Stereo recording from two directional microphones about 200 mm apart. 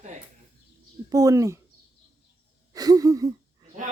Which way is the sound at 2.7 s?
20° right (ahead or behind).